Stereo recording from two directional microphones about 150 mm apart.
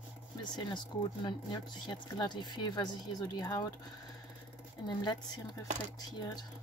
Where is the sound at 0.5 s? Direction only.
30° left (ahead or behind).